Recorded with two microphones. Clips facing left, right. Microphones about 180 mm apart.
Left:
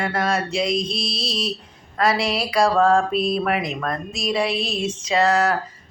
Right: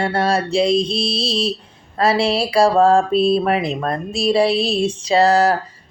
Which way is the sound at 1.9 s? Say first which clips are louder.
Right 4 dB; 30° right (ahead or behind).